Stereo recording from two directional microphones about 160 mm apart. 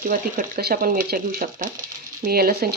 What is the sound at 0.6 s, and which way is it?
Speech, 75° right (ahead or behind).